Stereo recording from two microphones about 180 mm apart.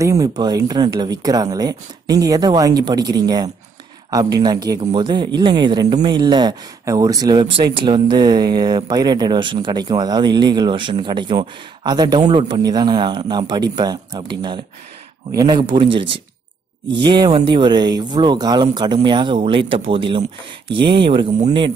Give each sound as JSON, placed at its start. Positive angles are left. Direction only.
{"t": 0.0, "sound": "speech", "side_deg": -20}